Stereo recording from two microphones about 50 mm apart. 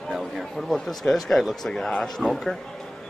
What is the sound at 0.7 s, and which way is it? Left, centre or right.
Speech, centre.